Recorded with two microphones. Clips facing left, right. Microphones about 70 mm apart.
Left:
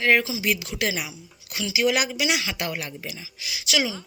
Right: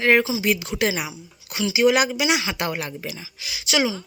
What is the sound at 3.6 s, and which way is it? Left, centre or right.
Speech, right.